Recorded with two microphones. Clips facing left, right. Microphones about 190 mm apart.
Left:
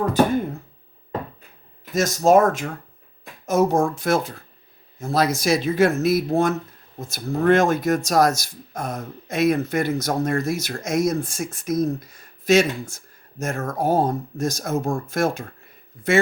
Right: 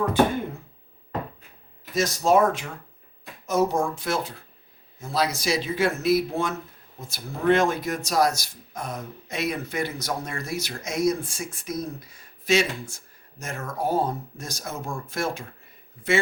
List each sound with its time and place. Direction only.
1.9 s speech: 45° left (ahead or behind)